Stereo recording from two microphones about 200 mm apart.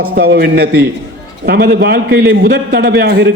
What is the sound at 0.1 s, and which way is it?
A man's voice, 50° right (ahead or behind).